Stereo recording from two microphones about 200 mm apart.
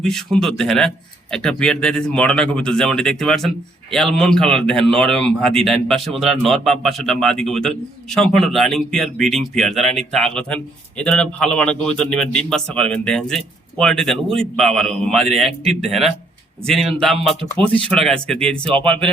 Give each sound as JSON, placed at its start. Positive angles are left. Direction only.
{"t": 0.0, "sound": "speech", "side_deg": 0}
{"t": 16.6, "sound": "speech", "side_deg": 0}